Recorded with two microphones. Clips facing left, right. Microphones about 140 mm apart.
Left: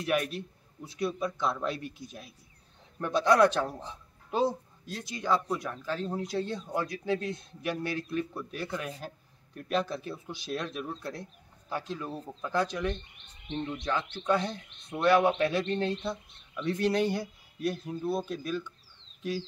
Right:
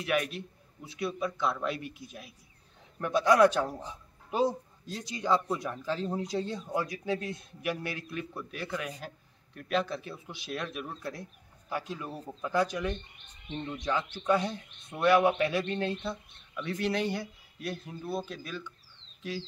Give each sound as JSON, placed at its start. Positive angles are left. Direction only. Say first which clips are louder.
{"t": 0.0, "sound": "a man's voice", "louder": "left 1 dB", "side_deg": 0}
{"t": 3.0, "sound": "a man's voice", "louder": "even", "side_deg": -10}
{"t": 14.1, "sound": "a man's voice", "louder": "right 1 dB", "side_deg": -10}